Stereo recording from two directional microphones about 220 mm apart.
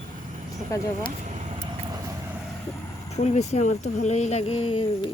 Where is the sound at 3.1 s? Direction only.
30° left (ahead or behind).